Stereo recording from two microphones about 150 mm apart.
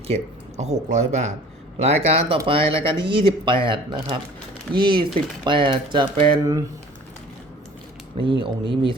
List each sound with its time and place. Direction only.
0.1 s a man's voice: 50° right (ahead or behind); by 6.4 s 35° right (ahead or behind)
6.4 s speech: 20° right (ahead or behind)
8.2 s speech: 35° right (ahead or behind)